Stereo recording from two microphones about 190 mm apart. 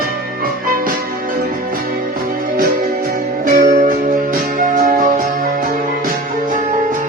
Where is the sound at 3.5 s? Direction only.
50° right (ahead or behind).